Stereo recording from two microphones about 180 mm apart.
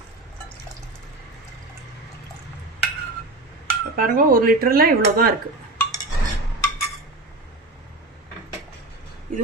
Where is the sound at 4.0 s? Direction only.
50° right (ahead or behind).